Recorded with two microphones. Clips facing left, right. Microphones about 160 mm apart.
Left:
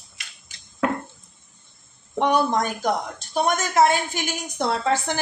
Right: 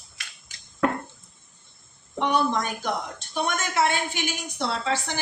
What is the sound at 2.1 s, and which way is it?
A woman's voice, 45° left (ahead or behind).